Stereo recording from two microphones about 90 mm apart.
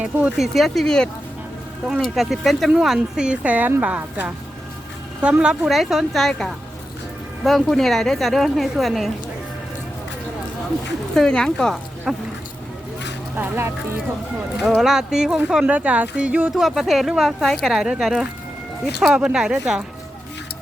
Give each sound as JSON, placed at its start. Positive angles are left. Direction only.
{"t": 0.0, "sound": "speech", "side_deg": -15}
{"t": 0.3, "sound": "a woman's voice", "side_deg": -5}
{"t": 11.1, "sound": "a woman's voice", "side_deg": 5}
{"t": 13.3, "sound": "speech", "side_deg": -25}
{"t": 14.8, "sound": "speech", "side_deg": -5}
{"t": 16.6, "sound": "a woman's voice", "side_deg": -5}
{"t": 17.7, "sound": "a woman's voice", "side_deg": -10}